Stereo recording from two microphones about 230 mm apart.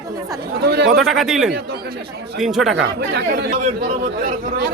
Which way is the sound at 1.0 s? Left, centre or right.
Centre.